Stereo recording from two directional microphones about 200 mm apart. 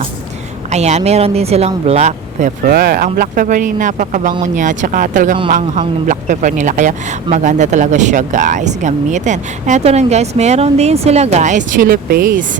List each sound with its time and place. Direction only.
0.7 s speech: 35° right (ahead or behind)
2.6 s speech: 50° right (ahead or behind)